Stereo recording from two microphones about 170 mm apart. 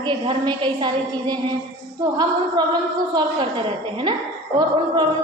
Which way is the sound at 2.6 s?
25° right (ahead or behind).